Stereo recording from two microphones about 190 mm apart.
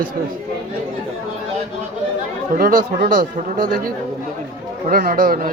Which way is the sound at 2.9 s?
45° right (ahead or behind).